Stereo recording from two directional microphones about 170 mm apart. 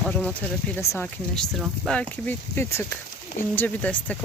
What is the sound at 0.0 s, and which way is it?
Speech, 5° left (ahead or behind).